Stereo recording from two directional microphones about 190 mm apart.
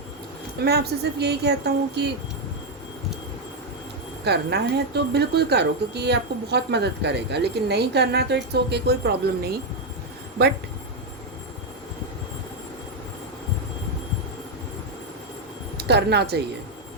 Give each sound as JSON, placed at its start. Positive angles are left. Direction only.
{"t": 0.6, "sound": "speech", "side_deg": -60}
{"t": 4.2, "sound": "speech", "side_deg": -60}
{"t": 15.8, "sound": "a woman's voice", "side_deg": -60}